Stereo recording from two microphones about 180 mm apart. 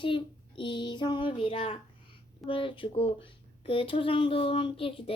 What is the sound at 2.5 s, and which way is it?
A child's voice, 30° left (ahead or behind).